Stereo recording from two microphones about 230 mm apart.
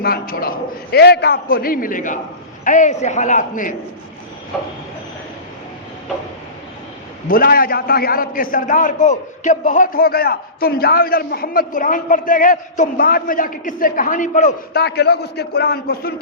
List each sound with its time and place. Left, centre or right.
0.0 s a man's voice: left
7.3 s a man's voice: left